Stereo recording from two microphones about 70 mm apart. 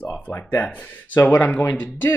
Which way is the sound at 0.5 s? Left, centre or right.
Left.